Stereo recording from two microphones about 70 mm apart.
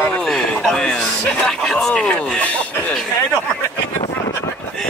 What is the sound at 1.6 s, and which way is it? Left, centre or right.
Speech, centre.